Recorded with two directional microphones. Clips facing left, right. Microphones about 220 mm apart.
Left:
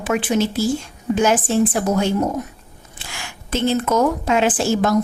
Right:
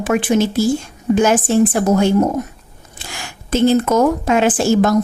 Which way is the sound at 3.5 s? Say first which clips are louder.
Right 5 dB; 45° right (ahead or behind).